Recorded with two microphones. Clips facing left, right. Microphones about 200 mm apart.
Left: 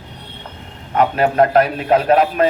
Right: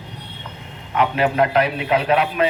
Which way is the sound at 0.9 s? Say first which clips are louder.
Left 3 dB; 45° left (ahead or behind).